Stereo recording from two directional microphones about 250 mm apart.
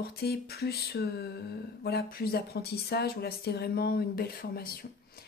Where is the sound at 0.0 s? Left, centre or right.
Left.